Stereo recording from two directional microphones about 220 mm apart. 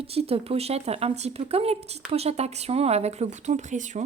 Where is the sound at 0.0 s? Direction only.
25° right (ahead or behind).